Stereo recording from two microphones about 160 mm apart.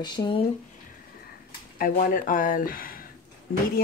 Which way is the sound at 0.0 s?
25° left (ahead or behind).